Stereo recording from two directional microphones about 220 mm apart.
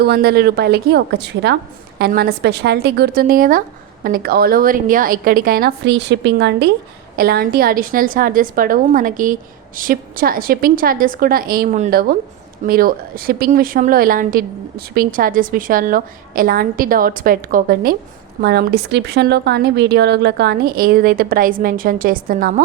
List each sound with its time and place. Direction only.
0.0 s speech: 45° right (ahead or behind)